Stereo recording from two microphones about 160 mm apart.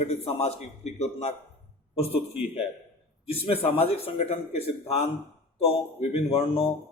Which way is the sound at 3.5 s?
35° left (ahead or behind).